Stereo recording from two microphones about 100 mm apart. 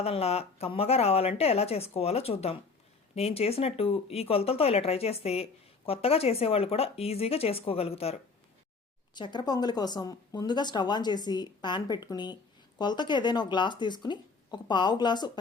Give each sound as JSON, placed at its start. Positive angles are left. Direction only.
{"t": 0.0, "sound": "speech", "side_deg": 90}
{"t": 9.1, "sound": "speech", "side_deg": 50}